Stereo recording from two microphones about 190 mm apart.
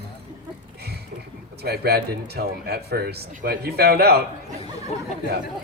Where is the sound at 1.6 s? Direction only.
55° right (ahead or behind).